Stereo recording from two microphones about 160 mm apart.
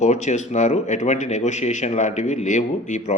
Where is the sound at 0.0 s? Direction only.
45° left (ahead or behind).